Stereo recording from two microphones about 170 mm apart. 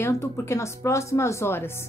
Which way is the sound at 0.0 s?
15° left (ahead or behind).